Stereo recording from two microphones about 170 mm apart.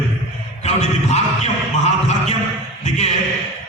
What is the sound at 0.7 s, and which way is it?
Speech, 40° left (ahead or behind).